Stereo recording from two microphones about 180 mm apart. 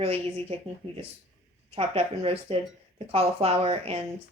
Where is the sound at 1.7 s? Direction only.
35° right (ahead or behind).